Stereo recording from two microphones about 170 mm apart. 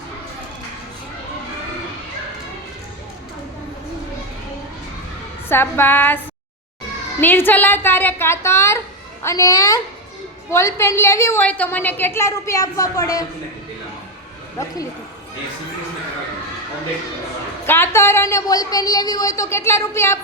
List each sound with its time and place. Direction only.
5.5 s a woman's voice: 15° left (ahead or behind)
7.2 s a woman's voice: 10° left (ahead or behind)
17.7 s a woman's voice: 15° left (ahead or behind)